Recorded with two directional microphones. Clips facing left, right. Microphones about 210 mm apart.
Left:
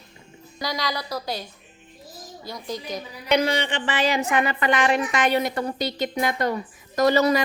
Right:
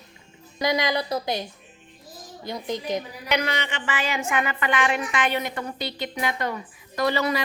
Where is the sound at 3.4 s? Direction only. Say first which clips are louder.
Left 5 dB; 35° left (ahead or behind).